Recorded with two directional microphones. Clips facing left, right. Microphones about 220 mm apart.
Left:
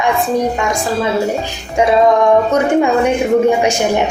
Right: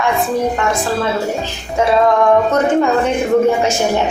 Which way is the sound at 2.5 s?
15° left (ahead or behind).